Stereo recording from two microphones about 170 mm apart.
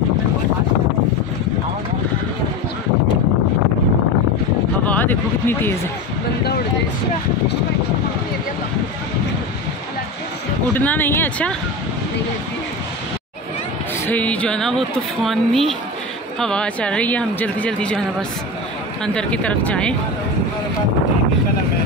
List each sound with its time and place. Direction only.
4.8 s a sound: 10° left (ahead or behind)
10.7 s speech: 10° left (ahead or behind)
14.0 s speech: 10° left (ahead or behind)
19.0 s speech: 5° left (ahead or behind)